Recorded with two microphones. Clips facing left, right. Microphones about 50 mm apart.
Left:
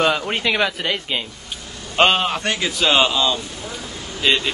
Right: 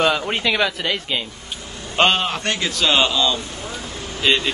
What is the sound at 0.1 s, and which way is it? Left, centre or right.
A man's voice, centre.